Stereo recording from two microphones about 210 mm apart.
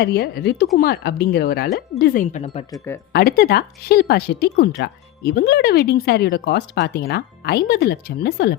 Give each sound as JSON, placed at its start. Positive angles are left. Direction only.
{"t": 0.0, "sound": "speech", "side_deg": 50}
{"t": 3.1, "sound": "speech", "side_deg": 50}